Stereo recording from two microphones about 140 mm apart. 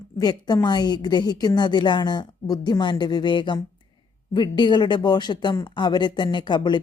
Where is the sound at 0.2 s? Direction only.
30° left (ahead or behind).